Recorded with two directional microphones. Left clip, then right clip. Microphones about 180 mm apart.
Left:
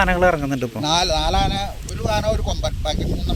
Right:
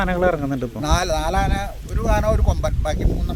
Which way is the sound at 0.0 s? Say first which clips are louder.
Left 3 dB; 5° left (ahead or behind).